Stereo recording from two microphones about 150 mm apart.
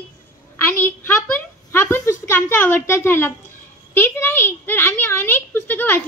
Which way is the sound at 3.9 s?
15° left (ahead or behind).